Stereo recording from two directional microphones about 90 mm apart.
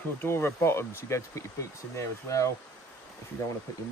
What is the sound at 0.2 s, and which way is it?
Speech, 25° left (ahead or behind).